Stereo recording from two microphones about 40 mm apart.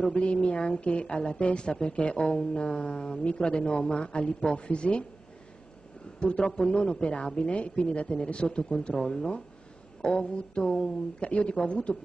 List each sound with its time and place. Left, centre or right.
0.2 s a woman's voice: left
6.1 s a woman's voice: left